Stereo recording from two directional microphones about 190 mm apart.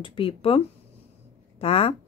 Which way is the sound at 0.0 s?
30° left (ahead or behind).